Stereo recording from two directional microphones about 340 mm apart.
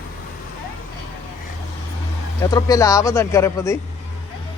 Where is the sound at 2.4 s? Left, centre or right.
Centre.